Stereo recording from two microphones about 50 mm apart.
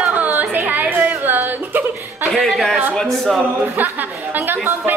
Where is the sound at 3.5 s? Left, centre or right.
Right.